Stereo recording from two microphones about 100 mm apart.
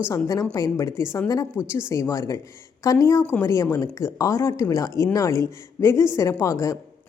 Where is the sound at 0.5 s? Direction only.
35° left (ahead or behind).